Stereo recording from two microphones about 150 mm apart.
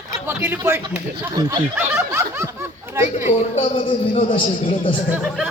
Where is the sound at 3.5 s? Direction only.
35° left (ahead or behind).